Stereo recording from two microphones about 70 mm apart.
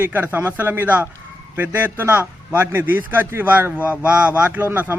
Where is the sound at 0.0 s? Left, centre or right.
Right.